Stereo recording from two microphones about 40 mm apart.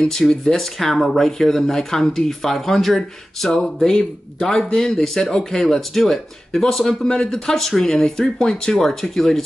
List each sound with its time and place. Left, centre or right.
0.0 s speech: centre
0.6 s speech: centre
4.9 s speech: centre